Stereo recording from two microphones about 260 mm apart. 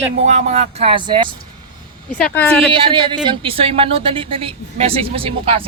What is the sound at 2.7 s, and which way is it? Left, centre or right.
A woman's voice, centre.